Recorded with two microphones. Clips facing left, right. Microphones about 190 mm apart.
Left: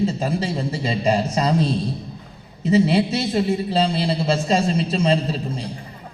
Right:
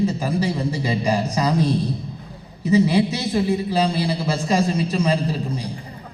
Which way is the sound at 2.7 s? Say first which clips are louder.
Even; 25° left (ahead or behind).